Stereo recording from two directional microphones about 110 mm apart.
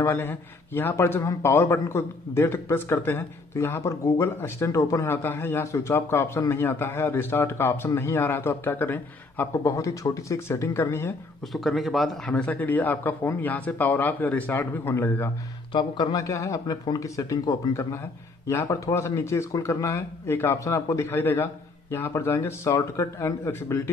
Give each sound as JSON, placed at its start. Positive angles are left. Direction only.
{"t": 0.0, "sound": "a man's voice", "side_deg": 20}
{"t": 11.5, "sound": "a man's voice", "side_deg": 0}
{"t": 15.7, "sound": "a man's voice", "side_deg": 40}